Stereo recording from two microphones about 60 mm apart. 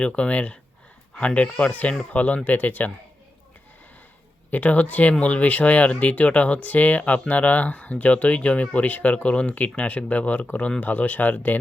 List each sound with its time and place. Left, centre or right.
0.0 s speech: centre
4.5 s speech: left